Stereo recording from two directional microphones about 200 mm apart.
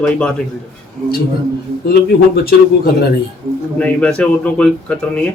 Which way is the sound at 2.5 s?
50° left (ahead or behind).